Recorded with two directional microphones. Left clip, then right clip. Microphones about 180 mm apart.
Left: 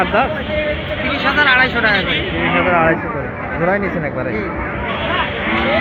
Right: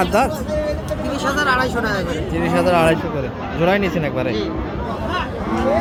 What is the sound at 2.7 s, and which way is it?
Speech, 35° right (ahead or behind).